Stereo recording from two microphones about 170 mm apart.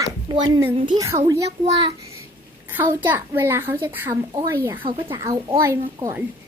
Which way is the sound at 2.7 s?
15° right (ahead or behind).